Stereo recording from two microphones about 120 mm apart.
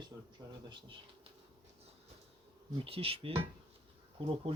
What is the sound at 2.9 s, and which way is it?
Speech, 50° right (ahead or behind).